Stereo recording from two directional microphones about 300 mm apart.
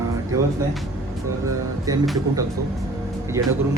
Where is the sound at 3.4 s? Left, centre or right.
Centre.